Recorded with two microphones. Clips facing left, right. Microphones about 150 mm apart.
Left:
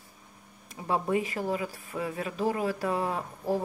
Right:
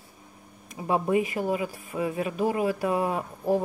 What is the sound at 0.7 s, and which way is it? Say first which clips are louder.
Speech: right 3 dB; 15° right (ahead or behind).